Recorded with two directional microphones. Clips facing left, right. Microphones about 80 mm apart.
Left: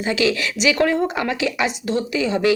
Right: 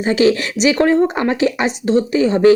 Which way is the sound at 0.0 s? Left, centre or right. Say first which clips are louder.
Right 6 dB; right.